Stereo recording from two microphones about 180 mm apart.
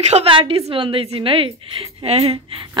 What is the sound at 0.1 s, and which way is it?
A woman's voice, 30° right (ahead or behind).